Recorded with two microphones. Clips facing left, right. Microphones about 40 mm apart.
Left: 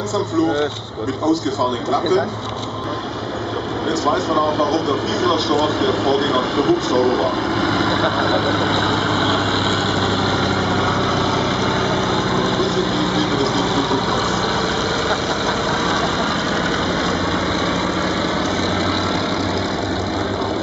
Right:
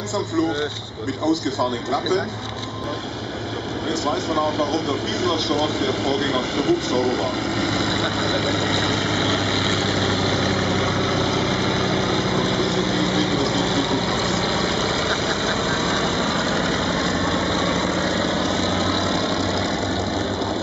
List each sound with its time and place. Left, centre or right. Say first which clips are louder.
4.1 s speech: left 4 dB; centre
5.2 s vehicle: left 4 dB; centre; by 13.8 s left